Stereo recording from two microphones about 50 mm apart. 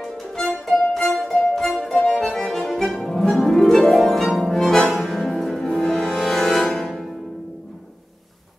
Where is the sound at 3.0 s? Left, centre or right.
Centre.